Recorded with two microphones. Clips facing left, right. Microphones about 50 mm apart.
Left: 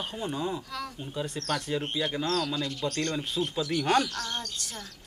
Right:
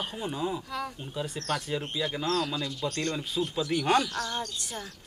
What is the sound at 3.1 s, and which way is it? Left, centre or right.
Speech, centre.